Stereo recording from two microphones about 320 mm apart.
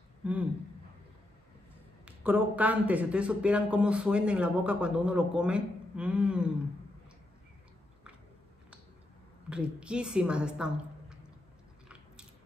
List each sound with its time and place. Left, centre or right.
0.2 s speech: centre
2.0 s speech: centre
9.5 s speech: centre